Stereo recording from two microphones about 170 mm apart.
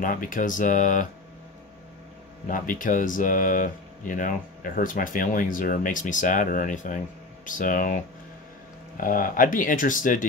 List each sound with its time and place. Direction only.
0.0 s speech: 55° left (ahead or behind)
2.4 s speech: 50° left (ahead or behind)